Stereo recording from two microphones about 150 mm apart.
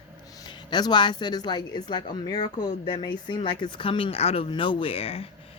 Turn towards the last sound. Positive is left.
turn(degrees=40)  # may be behind; listen again after turning